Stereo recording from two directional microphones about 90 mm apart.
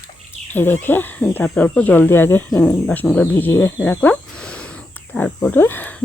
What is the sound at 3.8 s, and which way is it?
Speech, 20° left (ahead or behind).